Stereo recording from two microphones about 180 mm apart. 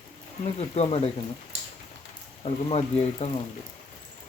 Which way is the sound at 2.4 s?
35° left (ahead or behind).